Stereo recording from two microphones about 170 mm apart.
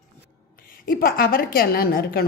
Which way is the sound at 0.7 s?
60° left (ahead or behind).